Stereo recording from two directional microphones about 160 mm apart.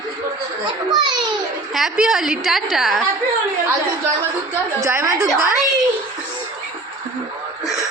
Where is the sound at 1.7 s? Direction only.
Centre (ahead or behind).